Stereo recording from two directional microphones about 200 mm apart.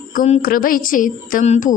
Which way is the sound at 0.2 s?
45° left (ahead or behind).